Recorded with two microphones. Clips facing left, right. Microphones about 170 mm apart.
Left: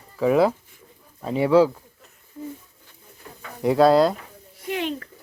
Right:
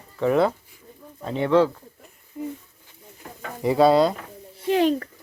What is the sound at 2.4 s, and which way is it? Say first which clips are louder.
Speech: right 3 dB; 15° right (ahead or behind).